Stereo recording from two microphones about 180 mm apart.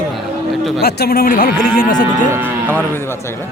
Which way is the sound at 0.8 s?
60° left (ahead or behind).